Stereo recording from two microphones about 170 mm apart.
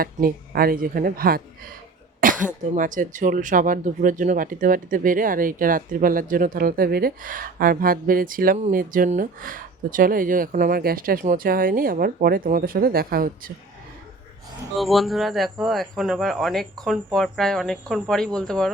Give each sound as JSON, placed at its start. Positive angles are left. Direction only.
{"t": 0.0, "sound": "speech", "side_deg": -60}
{"t": 2.2, "sound": "cough", "side_deg": -55}
{"t": 2.7, "sound": "speech", "side_deg": -50}
{"t": 14.8, "sound": "speech", "side_deg": 0}